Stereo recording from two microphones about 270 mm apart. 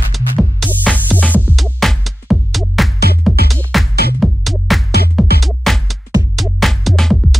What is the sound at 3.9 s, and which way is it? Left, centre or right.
Music, left.